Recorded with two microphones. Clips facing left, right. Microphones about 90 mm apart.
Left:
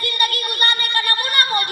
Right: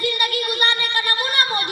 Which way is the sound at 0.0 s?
20° right (ahead or behind).